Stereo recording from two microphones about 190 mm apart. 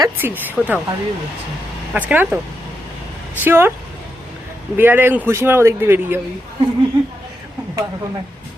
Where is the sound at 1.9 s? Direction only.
10° right (ahead or behind).